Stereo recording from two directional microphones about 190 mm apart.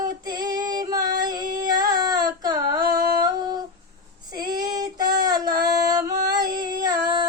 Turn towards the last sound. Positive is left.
turn(degrees=-20)  # may be behind; listen again after turning